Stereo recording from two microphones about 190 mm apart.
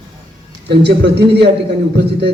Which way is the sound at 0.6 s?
60° right (ahead or behind).